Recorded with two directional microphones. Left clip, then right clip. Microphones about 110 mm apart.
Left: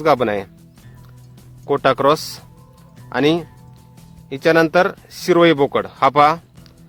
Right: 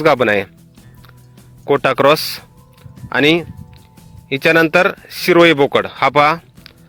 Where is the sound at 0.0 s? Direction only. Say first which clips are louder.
Right 4 dB; 35° right (ahead or behind).